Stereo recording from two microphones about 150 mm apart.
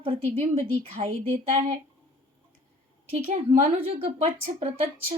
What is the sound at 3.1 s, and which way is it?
A woman's voice, 45° right (ahead or behind).